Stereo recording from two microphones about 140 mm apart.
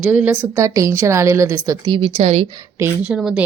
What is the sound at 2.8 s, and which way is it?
Speech, 10° right (ahead or behind).